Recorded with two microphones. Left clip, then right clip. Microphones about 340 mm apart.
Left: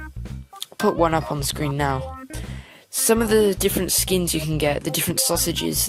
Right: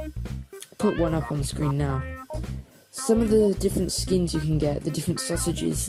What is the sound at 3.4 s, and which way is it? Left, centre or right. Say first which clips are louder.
Speech: left 3 dB; left.